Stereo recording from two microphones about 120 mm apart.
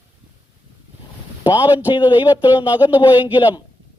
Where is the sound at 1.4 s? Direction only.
40° left (ahead or behind).